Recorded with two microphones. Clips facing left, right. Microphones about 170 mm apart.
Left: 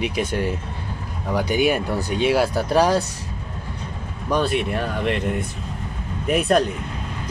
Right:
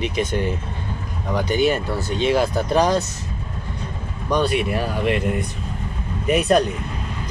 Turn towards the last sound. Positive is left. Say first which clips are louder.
# right 1 dB
turn(degrees=0)  # may be behind; listen again after turning